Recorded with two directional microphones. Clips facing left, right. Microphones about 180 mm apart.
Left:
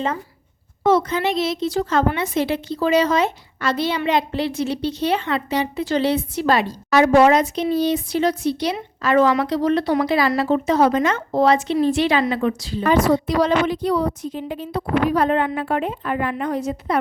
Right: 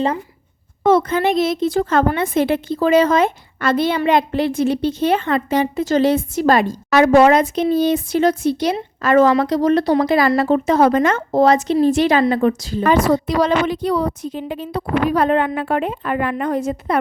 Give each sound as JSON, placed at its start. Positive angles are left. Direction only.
{"t": 0.9, "sound": "a woman's voice", "side_deg": -55}
{"t": 12.8, "sound": "a woman's voice", "side_deg": -75}